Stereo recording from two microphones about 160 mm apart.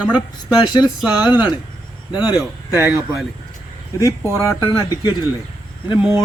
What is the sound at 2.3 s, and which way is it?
Speech, 5° right (ahead or behind).